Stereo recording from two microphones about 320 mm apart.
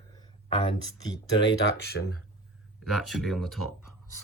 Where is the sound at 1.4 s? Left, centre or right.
Left.